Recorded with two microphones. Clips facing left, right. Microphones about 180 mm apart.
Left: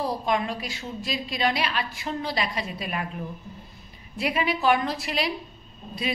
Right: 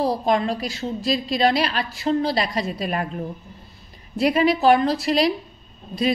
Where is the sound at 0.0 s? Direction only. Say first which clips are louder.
Right 5 dB; 35° right (ahead or behind).